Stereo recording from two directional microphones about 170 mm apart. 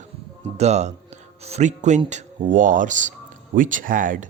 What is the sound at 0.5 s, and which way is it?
Speech, 40° right (ahead or behind).